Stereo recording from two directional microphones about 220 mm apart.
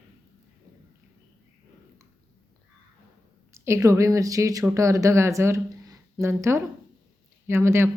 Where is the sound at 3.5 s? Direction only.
15° right (ahead or behind).